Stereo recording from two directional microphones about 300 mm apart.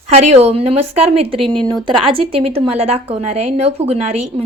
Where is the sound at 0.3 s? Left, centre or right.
Centre.